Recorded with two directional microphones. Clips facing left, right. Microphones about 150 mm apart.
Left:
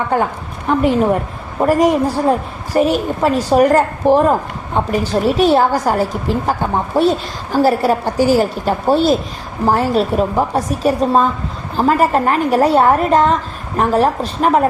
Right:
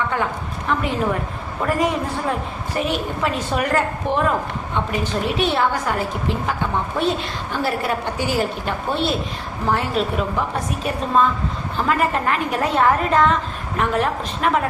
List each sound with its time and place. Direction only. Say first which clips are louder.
0.1 s a woman's voice: left 6 dB; 40° left (ahead or behind)